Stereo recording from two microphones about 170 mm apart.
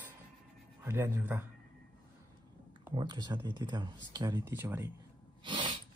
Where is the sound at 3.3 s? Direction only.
20° right (ahead or behind).